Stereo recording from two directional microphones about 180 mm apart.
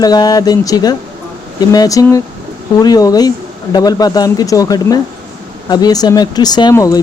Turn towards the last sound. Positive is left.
turn(degrees=20)  # may be behind; listen again after turning